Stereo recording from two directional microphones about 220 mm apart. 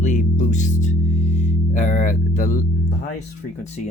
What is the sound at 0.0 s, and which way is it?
Music, 35° left (ahead or behind).